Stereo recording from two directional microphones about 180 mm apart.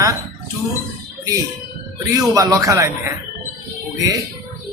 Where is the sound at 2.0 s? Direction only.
20° right (ahead or behind).